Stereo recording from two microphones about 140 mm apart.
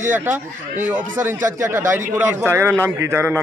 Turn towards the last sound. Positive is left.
turn(degrees=-15)  # may be behind; listen again after turning